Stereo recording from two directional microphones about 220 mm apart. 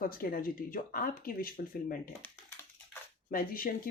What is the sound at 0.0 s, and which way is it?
Speech, 40° left (ahead or behind).